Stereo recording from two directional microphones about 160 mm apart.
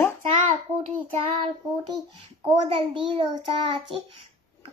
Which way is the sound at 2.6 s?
35° right (ahead or behind).